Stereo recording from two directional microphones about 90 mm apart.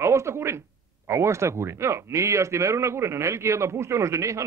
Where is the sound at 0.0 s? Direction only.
30° right (ahead or behind).